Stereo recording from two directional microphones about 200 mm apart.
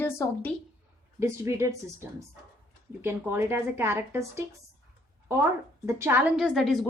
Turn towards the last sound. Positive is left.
turn(degrees=0)  # may be behind; listen again after turning